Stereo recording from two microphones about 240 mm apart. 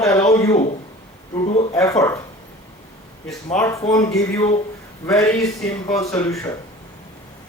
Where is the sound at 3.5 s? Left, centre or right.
Centre.